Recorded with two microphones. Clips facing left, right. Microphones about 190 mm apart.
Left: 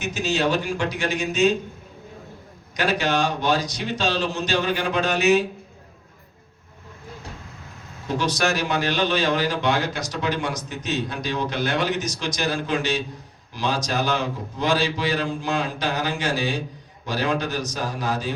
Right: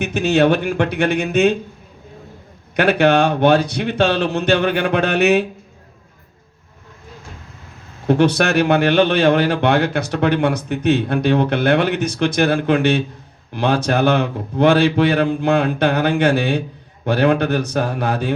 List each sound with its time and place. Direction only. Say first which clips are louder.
0.0 s a man's voice: right 8 dB; 60° right (ahead or behind)
2.7 s a man's voice: right 9 dB; 60° right (ahead or behind)
8.0 s a man's voice: right 9 dB; 60° right (ahead or behind)